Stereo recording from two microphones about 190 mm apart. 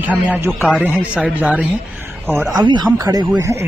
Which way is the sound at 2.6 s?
25° right (ahead or behind).